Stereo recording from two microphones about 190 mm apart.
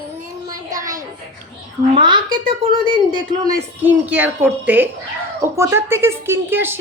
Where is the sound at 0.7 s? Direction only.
15° right (ahead or behind).